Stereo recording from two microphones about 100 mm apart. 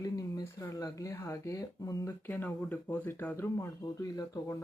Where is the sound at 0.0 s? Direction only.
35° left (ahead or behind).